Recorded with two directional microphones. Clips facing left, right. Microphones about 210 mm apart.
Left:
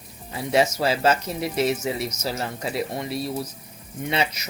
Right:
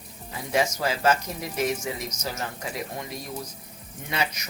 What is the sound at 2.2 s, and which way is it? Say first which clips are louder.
Speech: left 5 dB; 30° left (ahead or behind).